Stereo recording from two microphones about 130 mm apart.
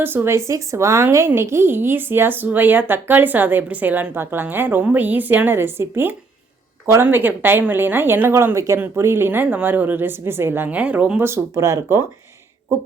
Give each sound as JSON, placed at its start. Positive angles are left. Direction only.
{"t": 0.0, "sound": "a woman's voice", "side_deg": -15}